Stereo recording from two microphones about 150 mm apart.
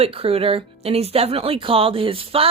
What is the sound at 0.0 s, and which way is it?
Speech, 40° right (ahead or behind).